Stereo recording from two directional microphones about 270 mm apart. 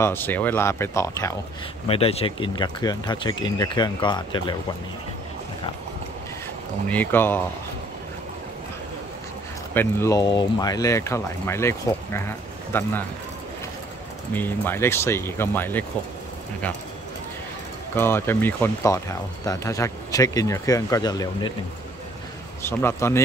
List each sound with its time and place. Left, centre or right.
0.0 s speech: centre
1.9 s speech: left
6.9 s speech: centre
9.8 s speech: centre
14.3 s speech: centre
17.9 s speech: centre
22.6 s speech: centre